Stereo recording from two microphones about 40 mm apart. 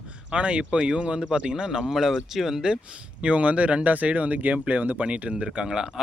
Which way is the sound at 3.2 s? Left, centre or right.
Right.